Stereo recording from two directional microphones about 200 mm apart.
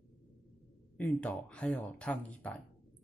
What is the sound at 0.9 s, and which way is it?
Speech, 5° left (ahead or behind).